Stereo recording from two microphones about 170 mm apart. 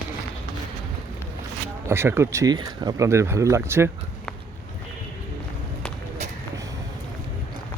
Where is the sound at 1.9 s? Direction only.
15° right (ahead or behind).